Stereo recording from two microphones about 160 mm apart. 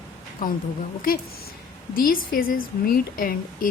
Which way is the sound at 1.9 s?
65° left (ahead or behind).